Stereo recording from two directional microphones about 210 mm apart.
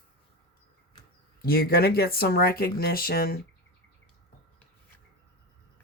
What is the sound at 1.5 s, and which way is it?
Speech, 45° left (ahead or behind).